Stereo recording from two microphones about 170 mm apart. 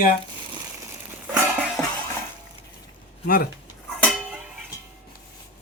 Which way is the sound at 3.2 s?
60° left (ahead or behind).